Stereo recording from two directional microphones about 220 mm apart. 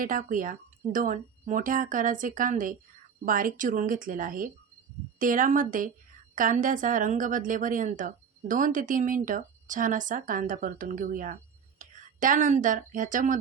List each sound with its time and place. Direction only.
0.0 s a woman's voice: 35° right (ahead or behind)